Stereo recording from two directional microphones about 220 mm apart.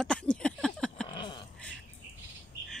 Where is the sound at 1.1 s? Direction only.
20° left (ahead or behind).